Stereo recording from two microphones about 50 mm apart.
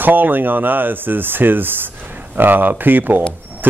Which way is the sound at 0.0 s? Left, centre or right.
Right.